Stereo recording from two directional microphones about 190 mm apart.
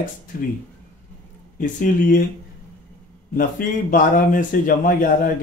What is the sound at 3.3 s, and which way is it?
Speech, 45° left (ahead or behind).